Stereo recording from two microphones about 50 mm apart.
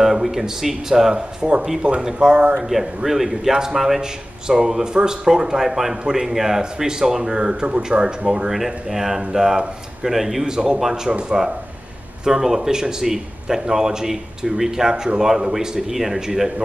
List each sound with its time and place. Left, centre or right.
0.0 s speech: centre
11.1 s speech: centre